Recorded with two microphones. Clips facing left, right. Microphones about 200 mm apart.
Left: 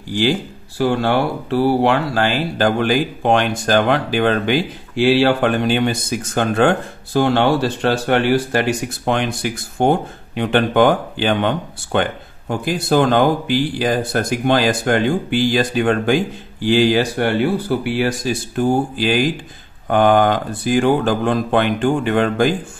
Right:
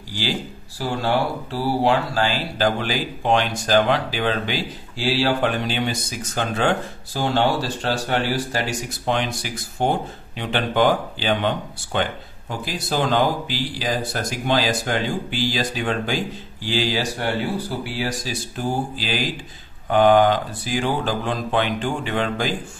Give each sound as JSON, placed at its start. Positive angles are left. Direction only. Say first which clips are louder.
{"t": 0.1, "sound": "speech", "louder": "left 8 dB", "side_deg": 55}